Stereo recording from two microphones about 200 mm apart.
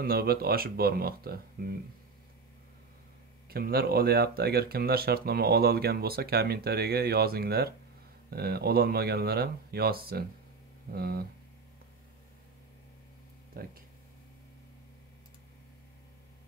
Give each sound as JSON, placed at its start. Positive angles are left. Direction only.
{"t": 0.0, "sound": "speech", "side_deg": -50}
{"t": 3.4, "sound": "speech", "side_deg": -50}
{"t": 13.5, "sound": "speech", "side_deg": -50}